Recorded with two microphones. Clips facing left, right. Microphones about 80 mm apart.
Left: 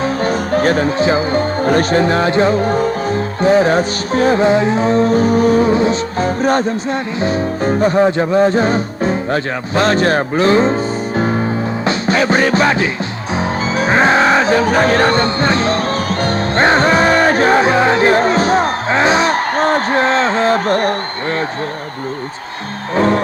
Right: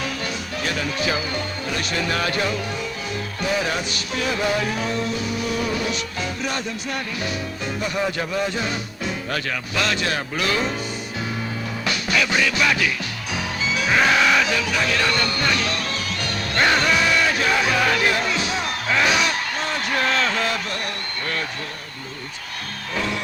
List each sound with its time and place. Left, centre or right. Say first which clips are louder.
0.0 s music: left 12 dB; left
23.0 s music: left 13 dB; left